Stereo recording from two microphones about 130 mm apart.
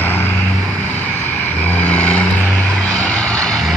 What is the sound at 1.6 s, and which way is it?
Vehicle, 10° left (ahead or behind).